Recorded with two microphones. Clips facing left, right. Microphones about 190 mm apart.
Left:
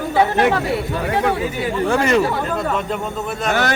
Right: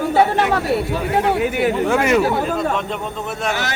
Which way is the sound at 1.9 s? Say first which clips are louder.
Left 2 dB; 10° right (ahead or behind).